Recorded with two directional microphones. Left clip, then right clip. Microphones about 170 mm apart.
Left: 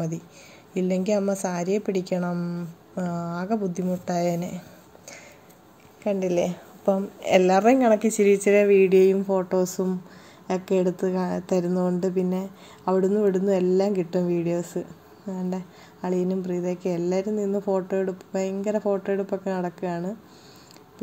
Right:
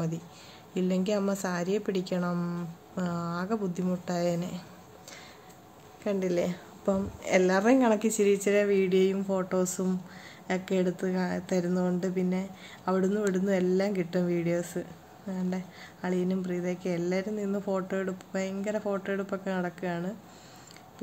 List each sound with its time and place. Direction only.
0.7 s a woman's voice: 15° left (ahead or behind)
6.0 s a woman's voice: 15° left (ahead or behind)
9.1 s a woman's voice: 10° left (ahead or behind)